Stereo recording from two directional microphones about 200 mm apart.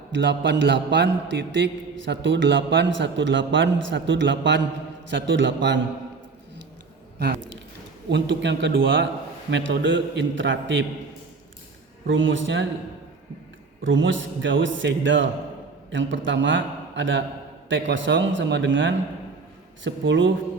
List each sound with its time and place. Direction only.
0.1 s a man's voice: 60° right (ahead or behind)
7.2 s a man's voice: 55° right (ahead or behind)
12.0 s a man's voice: 70° right (ahead or behind)
13.8 s a man's voice: 70° right (ahead or behind)